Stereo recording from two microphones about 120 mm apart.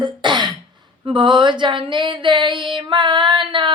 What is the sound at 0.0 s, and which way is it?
Cough, 40° right (ahead or behind).